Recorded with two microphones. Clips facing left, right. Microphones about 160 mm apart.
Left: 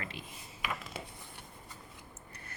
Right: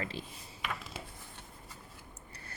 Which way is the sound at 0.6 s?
Centre (ahead or behind).